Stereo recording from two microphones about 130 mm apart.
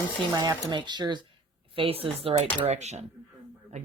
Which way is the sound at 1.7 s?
45° right (ahead or behind).